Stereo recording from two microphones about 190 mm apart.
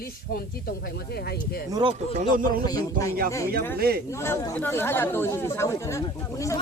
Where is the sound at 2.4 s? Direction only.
45° right (ahead or behind).